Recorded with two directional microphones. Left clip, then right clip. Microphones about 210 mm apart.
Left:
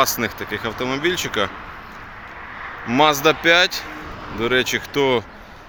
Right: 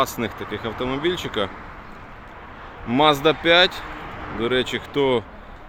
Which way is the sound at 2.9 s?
Centre (ahead or behind).